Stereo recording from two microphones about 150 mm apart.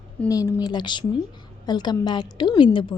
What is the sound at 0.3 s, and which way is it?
A woman's voice, 20° left (ahead or behind).